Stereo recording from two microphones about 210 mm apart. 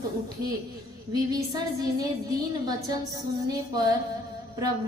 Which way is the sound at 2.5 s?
20° right (ahead or behind).